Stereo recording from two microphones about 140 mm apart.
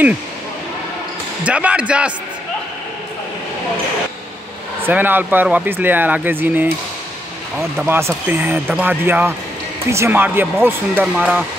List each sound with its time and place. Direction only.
1.4 s speech: 10° right (ahead or behind)
4.8 s speech: 15° right (ahead or behind)
7.7 s speech: 15° right (ahead or behind)